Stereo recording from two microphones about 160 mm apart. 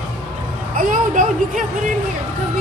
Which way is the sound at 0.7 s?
55° right (ahead or behind).